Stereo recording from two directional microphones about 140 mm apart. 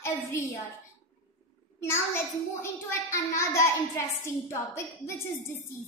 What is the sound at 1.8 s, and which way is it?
Child singing, 20° left (ahead or behind).